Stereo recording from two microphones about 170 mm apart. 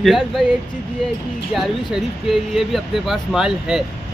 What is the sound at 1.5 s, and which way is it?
Speech, centre (ahead or behind).